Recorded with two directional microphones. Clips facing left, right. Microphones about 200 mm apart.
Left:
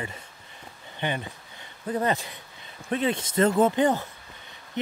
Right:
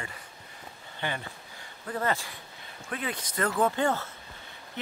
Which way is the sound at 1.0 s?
20° left (ahead or behind).